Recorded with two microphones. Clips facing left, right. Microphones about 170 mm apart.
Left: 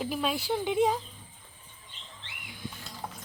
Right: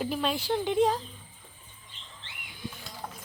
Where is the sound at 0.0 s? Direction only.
5° left (ahead or behind).